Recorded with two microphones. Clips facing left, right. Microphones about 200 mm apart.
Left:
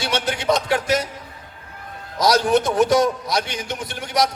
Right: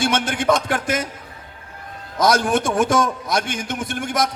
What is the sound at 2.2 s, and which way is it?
A man's voice, 50° right (ahead or behind).